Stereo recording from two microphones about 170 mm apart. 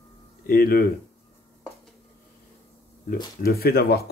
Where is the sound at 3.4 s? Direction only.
65° left (ahead or behind).